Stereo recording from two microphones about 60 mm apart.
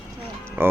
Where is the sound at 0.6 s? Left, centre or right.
Right.